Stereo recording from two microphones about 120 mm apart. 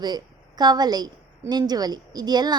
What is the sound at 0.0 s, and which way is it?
A woman's voice, 35° right (ahead or behind).